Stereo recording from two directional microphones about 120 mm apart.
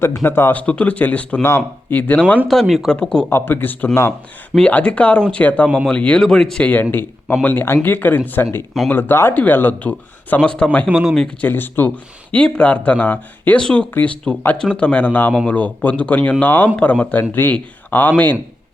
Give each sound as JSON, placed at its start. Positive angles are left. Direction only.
{"t": 0.0, "sound": "speech", "side_deg": 20}
{"t": 2.5, "sound": "speech", "side_deg": 0}
{"t": 3.2, "sound": "speech", "side_deg": 15}
{"t": 5.6, "sound": "speech", "side_deg": 0}
{"t": 10.8, "sound": "speech", "side_deg": -5}
{"t": 11.4, "sound": "speech", "side_deg": 15}